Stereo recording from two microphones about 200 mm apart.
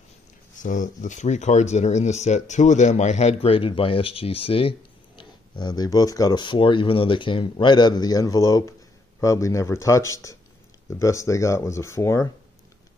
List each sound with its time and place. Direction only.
0.6 s speech: 40° left (ahead or behind); by 12.3 s 15° left (ahead or behind)